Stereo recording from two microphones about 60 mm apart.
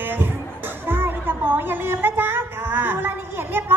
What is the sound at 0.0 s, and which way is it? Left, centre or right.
A woman's voice, right.